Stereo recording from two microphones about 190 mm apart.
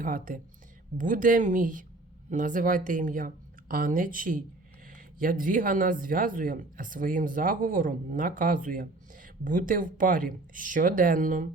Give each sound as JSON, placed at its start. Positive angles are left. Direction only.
{"t": 0.0, "sound": "speech", "side_deg": -45}